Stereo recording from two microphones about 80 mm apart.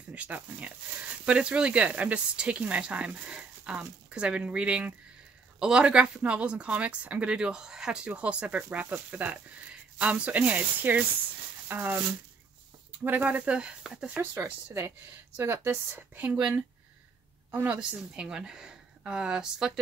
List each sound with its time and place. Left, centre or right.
0.1 s speech: centre
13.0 s speech: right
14.4 s speech: right
17.6 s speech: centre